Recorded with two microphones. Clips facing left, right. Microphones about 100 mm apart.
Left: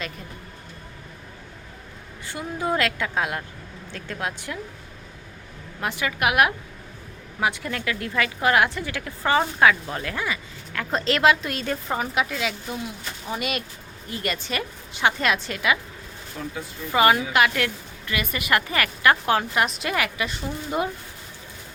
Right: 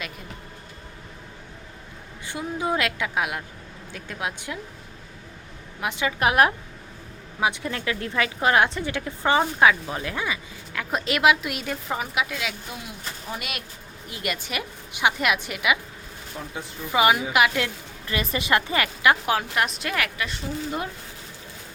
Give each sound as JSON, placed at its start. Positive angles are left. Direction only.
{"t": 2.2, "sound": "speech", "side_deg": -15}
{"t": 5.8, "sound": "a woman's voice", "side_deg": -20}
{"t": 6.1, "sound": "a woman's voice", "side_deg": -30}
{"t": 7.4, "sound": "a woman's voice", "side_deg": -20}
{"t": 16.6, "sound": "a woman's voice", "side_deg": -25}
{"t": 16.9, "sound": "speech", "side_deg": -15}
{"t": 18.0, "sound": "a woman's voice", "side_deg": -30}
{"t": 19.2, "sound": "speech", "side_deg": 0}